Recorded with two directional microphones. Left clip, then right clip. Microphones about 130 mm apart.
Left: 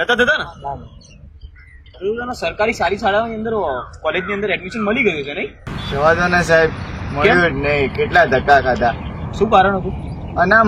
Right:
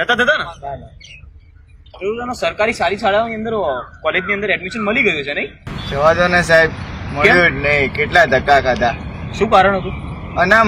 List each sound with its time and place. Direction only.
0.0 s speech: centre (ahead or behind)
2.0 s speech: centre (ahead or behind)